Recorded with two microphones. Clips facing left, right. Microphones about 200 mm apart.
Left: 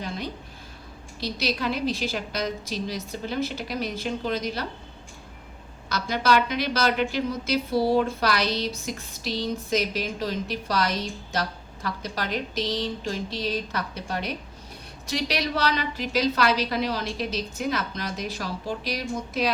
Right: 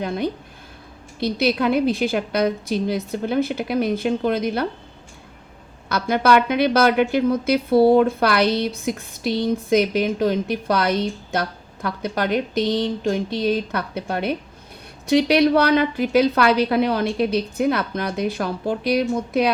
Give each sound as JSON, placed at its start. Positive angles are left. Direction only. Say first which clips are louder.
{"t": 1.2, "sound": "a woman's voice", "louder": "right 8 dB", "side_deg": -55}
{"t": 5.9, "sound": "a woman's voice", "louder": "right 6 dB", "side_deg": -55}